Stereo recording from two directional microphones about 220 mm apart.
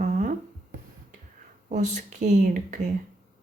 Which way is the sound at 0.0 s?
35° right (ahead or behind).